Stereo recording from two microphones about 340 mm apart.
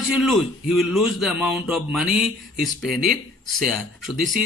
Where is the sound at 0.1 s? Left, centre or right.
Centre.